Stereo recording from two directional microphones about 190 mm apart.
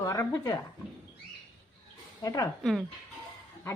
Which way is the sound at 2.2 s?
20° left (ahead or behind).